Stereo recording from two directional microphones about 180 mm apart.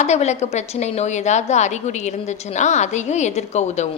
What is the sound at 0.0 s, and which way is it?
A woman's voice, 40° left (ahead or behind).